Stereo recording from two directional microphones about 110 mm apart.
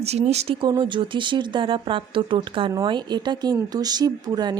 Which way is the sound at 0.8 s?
45° right (ahead or behind).